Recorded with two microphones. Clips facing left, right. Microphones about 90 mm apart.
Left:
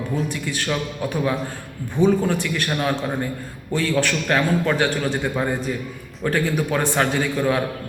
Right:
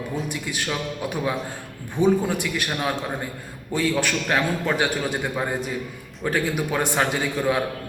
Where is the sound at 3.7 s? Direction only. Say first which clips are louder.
Left 2 dB; 15° right (ahead or behind).